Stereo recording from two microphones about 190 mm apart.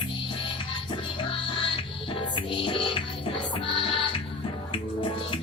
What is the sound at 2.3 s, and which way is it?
Music, 25° left (ahead or behind).